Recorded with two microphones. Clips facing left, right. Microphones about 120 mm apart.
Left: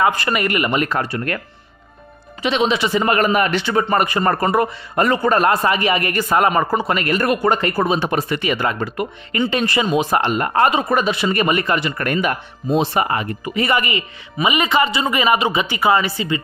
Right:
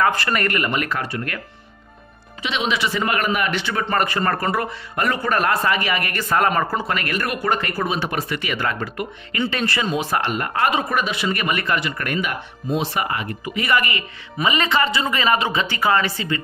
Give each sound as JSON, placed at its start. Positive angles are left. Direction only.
{"t": 0.0, "sound": "speech", "side_deg": 10}
{"t": 0.9, "sound": "a man's voice", "side_deg": 35}
{"t": 2.4, "sound": "a man's voice", "side_deg": 35}
{"t": 3.7, "sound": "a man's voice", "side_deg": 15}
{"t": 12.1, "sound": "speech", "side_deg": 40}